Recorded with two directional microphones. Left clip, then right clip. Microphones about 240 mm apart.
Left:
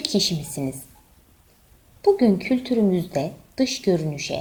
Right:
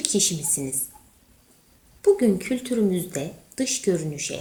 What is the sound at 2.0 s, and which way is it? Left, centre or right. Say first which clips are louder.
A woman's voice: left 1 dB; left.